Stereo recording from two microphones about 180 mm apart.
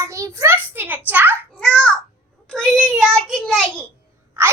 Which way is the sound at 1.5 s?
5° left (ahead or behind).